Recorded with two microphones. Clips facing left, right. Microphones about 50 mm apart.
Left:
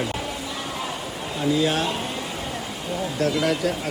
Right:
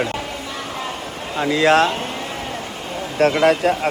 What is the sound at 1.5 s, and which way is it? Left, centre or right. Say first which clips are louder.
Speech: right 9 dB; right.